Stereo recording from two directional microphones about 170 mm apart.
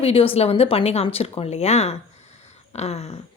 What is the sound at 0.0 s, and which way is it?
A woman's voice, 35° left (ahead or behind).